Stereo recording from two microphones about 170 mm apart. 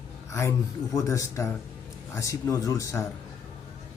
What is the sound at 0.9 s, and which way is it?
A man's voice, 20° left (ahead or behind).